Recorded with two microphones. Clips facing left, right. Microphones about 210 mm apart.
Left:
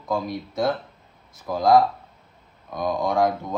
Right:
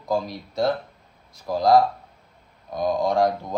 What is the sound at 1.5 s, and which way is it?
Speech, centre (ahead or behind).